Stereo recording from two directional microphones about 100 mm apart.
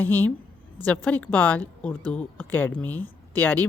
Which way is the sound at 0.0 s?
20° left (ahead or behind).